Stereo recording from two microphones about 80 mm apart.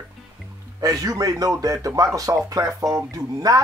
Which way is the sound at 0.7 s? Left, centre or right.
Right.